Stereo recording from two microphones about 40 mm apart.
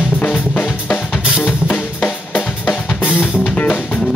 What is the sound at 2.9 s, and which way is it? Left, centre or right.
Drum kit, left.